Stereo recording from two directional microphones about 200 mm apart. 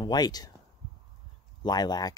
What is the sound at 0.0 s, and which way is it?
Speech, 20° left (ahead or behind).